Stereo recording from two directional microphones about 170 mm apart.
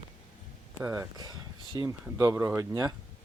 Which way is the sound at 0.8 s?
10° right (ahead or behind).